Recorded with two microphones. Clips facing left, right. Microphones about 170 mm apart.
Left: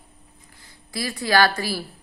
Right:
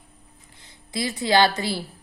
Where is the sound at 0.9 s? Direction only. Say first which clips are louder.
Right 1 dB; 20° right (ahead or behind).